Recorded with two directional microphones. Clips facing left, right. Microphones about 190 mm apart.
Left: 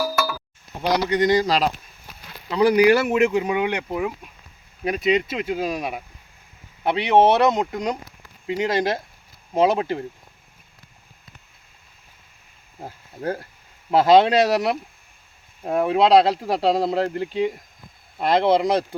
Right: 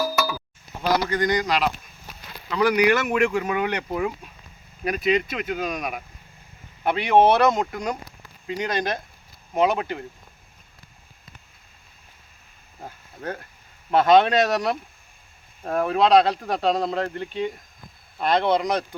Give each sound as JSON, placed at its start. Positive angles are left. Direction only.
{"t": 0.2, "sound": "a sound", "side_deg": -5}
{"t": 0.8, "sound": "speech", "side_deg": 20}
{"t": 4.8, "sound": "speech", "side_deg": 20}
{"t": 13.2, "sound": "speech", "side_deg": 35}